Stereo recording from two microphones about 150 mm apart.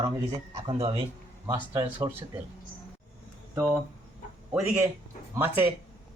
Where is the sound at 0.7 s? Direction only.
35° right (ahead or behind).